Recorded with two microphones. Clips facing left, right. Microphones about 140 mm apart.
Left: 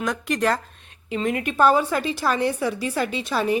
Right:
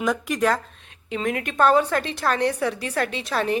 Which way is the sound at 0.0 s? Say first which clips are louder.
Right 1 dB; 5° right (ahead or behind).